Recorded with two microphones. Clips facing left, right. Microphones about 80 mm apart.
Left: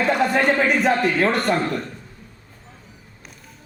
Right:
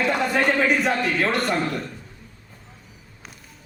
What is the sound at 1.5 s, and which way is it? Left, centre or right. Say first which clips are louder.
Speech: left 3 dB; left.